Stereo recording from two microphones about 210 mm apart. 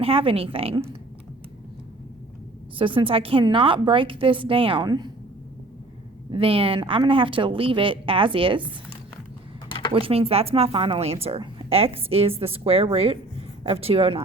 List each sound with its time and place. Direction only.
0.0 s a woman's voice: 25° right (ahead or behind)
2.7 s a woman's voice: 25° right (ahead or behind)
6.3 s a woman's voice: 25° right (ahead or behind)
9.6 s a sound: 25° left (ahead or behind)
9.9 s a woman's voice: 25° right (ahead or behind)